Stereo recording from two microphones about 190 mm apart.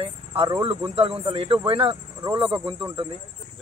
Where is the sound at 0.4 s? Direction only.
25° right (ahead or behind).